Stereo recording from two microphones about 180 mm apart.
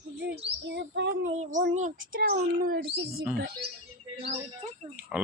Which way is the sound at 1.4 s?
45° right (ahead or behind).